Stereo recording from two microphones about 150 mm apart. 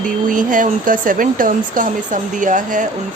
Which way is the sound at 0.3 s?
60° right (ahead or behind).